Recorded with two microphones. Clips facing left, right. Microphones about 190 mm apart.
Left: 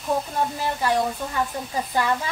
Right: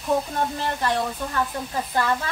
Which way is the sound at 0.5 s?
10° left (ahead or behind).